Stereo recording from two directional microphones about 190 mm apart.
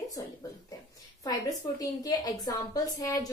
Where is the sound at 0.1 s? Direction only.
20° left (ahead or behind).